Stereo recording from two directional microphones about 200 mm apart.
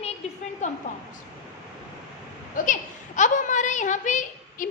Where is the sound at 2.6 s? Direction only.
40° left (ahead or behind).